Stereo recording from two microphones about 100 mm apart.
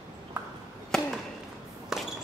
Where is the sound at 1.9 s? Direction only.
5° right (ahead or behind).